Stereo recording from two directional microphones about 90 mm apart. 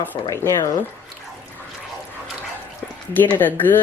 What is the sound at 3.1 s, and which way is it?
Speech, 20° left (ahead or behind).